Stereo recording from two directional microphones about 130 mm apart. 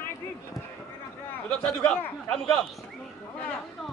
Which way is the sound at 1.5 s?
5° left (ahead or behind).